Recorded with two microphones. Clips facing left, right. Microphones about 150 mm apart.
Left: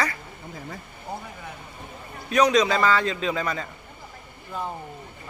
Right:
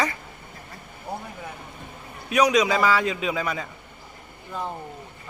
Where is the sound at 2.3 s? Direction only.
10° right (ahead or behind).